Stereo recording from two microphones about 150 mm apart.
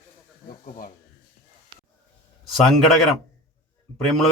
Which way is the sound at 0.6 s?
60° left (ahead or behind).